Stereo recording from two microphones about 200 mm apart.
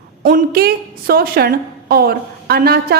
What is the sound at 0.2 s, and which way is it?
A woman's voice, 45° right (ahead or behind).